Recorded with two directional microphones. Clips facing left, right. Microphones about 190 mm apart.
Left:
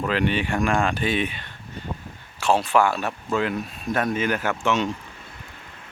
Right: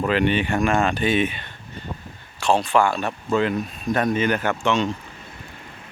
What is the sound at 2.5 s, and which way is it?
Speech, 5° left (ahead or behind).